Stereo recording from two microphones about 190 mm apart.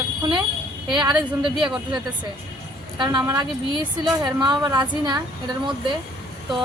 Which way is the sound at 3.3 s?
20° right (ahead or behind).